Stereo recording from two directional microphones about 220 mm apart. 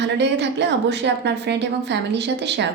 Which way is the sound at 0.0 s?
50° right (ahead or behind).